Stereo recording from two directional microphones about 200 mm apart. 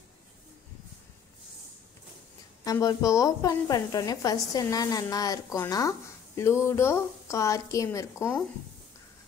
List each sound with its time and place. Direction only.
2.6 s a woman's voice: 20° left (ahead or behind)